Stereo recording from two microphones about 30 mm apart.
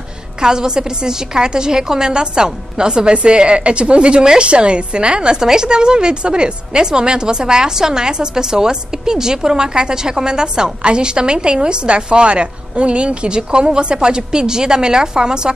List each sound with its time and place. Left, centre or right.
0.4 s a woman's voice: right
13.4 s speech: right